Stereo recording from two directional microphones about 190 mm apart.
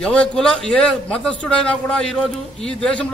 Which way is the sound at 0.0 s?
5° left (ahead or behind).